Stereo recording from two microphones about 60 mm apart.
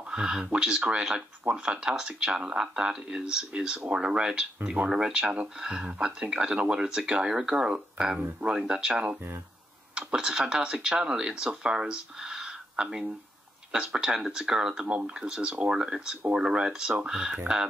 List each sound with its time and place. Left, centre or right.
0.1 s speech: centre